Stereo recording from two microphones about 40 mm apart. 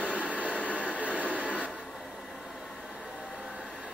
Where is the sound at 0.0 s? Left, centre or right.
Right.